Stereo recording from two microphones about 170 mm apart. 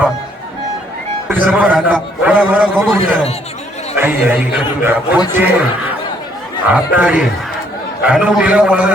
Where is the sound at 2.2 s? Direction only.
10° right (ahead or behind).